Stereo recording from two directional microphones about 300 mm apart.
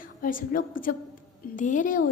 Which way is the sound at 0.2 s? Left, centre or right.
Left.